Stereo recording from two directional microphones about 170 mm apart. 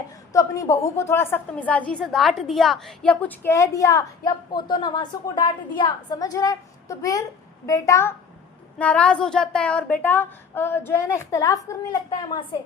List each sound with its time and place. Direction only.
0.3 s a woman's voice: 20° left (ahead or behind)